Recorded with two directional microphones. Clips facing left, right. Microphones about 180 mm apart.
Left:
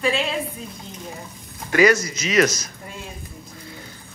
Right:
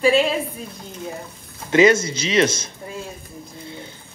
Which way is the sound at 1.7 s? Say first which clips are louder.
Right 2 dB; 25° right (ahead or behind).